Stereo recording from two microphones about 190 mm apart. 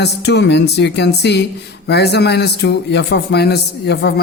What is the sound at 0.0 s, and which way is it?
A man's voice, 60° left (ahead or behind).